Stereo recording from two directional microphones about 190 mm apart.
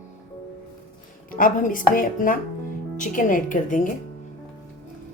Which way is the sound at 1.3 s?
45° left (ahead or behind).